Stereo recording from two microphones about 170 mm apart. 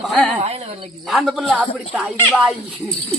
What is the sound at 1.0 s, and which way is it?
Speech, centre (ahead or behind).